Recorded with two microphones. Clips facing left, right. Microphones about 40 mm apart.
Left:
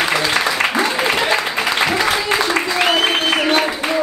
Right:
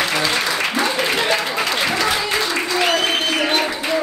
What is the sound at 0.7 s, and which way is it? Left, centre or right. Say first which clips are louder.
Applause: left 2 dB; centre.